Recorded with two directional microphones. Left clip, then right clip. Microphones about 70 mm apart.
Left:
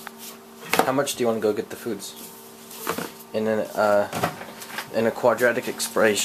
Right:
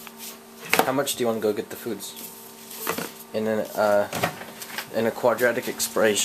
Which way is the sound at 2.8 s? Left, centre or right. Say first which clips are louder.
Even; right.